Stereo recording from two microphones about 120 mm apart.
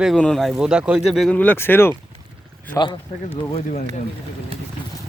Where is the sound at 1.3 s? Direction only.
15° left (ahead or behind).